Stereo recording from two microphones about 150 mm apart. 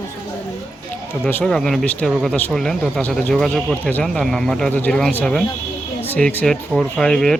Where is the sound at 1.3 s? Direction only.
10° left (ahead or behind).